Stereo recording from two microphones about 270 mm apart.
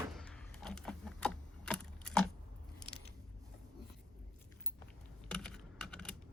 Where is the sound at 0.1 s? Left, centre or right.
Centre.